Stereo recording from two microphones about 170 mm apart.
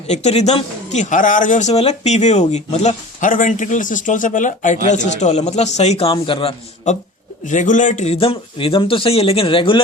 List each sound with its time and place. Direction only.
0.1 s speech: 40° left (ahead or behind)
7.4 s speech: 45° left (ahead or behind); by 9.8 s 30° left (ahead or behind)